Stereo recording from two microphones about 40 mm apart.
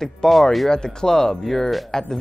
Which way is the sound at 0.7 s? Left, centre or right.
Centre.